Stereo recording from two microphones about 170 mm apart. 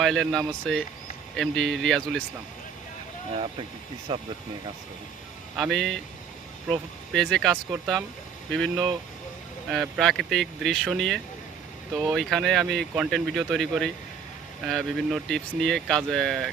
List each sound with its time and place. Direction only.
0.0 s speech: centre (ahead or behind)
3.3 s speech: 35° right (ahead or behind)
5.5 s speech: centre (ahead or behind)
7.1 s speech: 5° left (ahead or behind)
8.7 s speech: 25° right (ahead or behind)
9.6 s speech: centre (ahead or behind)